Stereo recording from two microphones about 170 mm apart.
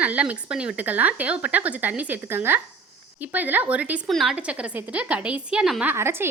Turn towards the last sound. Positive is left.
turn(degrees=-15)  # may be behind; listen again after turning